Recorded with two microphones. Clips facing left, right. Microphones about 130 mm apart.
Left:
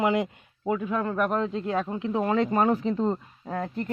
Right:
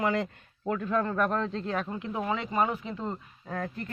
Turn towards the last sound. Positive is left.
turn(degrees=20)  # may be behind; listen again after turning